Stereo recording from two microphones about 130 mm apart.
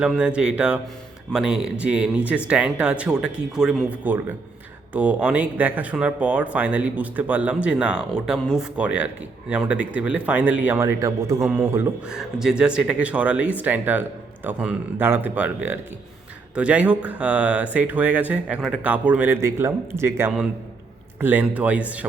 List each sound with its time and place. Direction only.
0.0 s speech: 5° right (ahead or behind)
12.0 s speech: 5° right (ahead or behind)